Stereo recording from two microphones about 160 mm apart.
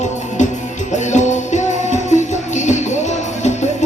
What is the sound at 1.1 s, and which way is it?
Music, 50° left (ahead or behind).